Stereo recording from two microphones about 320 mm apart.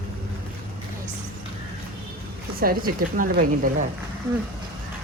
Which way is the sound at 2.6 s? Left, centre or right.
Right.